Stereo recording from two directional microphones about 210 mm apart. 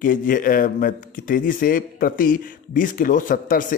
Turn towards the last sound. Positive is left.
turn(degrees=40)  # may be behind; listen again after turning